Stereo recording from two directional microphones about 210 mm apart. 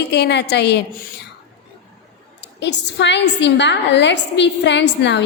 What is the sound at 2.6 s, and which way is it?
A woman's voice, 55° left (ahead or behind).